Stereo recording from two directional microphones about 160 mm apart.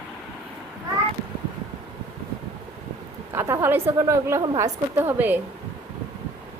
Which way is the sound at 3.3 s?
15° right (ahead or behind).